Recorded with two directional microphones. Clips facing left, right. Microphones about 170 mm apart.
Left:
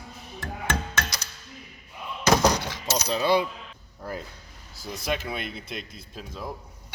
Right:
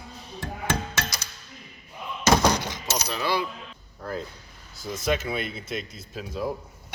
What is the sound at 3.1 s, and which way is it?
Coin, 25° left (ahead or behind).